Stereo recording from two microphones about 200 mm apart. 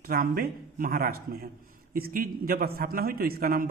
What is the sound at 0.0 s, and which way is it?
A man's voice, 45° right (ahead or behind).